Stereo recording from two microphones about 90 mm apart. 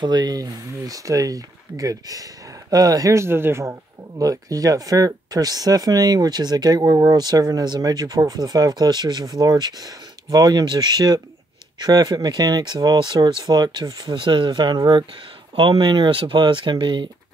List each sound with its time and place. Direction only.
0.0 s speech: 50° right (ahead or behind); by 3.7 s 30° right (ahead or behind)
4.2 s speech: 40° right (ahead or behind)
15.5 s speech: 65° right (ahead or behind)